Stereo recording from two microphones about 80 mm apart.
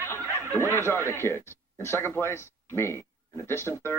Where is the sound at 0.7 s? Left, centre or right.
Left.